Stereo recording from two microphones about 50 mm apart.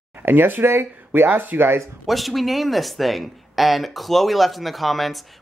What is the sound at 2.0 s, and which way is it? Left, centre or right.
A man's voice, centre.